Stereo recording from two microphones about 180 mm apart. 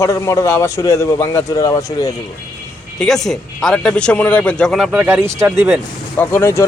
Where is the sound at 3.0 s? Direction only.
Centre (ahead or behind).